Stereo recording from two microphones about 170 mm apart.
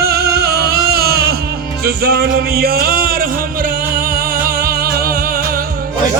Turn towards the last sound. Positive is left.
turn(degrees=-60)  # may be behind; listen again after turning